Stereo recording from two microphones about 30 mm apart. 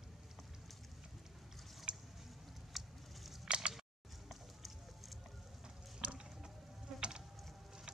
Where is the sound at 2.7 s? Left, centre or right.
Centre.